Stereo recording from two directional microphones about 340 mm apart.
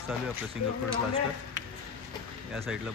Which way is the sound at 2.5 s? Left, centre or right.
Centre.